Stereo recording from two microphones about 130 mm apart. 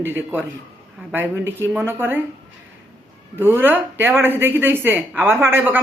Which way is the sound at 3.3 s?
15° right (ahead or behind).